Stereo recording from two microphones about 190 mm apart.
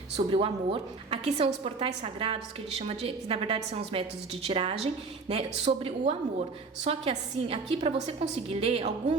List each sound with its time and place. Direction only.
0.3 s a woman's voice: 30° right (ahead or behind)